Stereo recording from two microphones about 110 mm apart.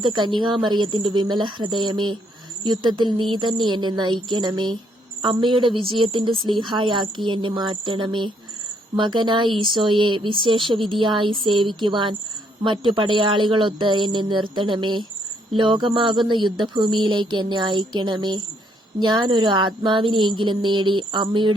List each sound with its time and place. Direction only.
0.0 s a woman's voice: 45° right (ahead or behind)